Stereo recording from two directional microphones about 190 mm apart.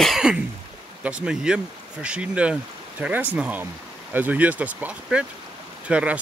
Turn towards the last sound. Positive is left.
turn(degrees=-5)  # may be behind; listen again after turning